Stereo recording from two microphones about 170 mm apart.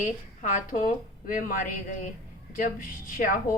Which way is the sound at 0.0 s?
50° left (ahead or behind).